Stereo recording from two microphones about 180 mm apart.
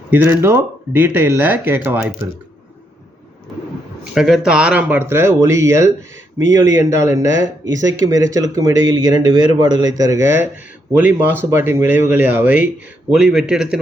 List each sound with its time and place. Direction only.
0.1 s speech: 10° right (ahead or behind)
4.1 s speech: 5° right (ahead or behind)
7.6 s speech: 90° right
7.9 s speech: 20° right (ahead or behind); by 13.7 s 5° right (ahead or behind)